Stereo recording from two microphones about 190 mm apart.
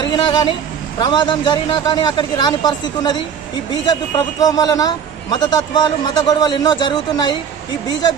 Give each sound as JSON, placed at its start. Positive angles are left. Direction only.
{"t": 0.0, "sound": "speech", "side_deg": 25}